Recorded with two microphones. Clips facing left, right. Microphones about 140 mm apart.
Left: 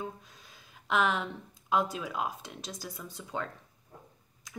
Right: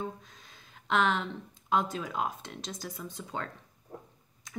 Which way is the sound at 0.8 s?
5° left (ahead or behind).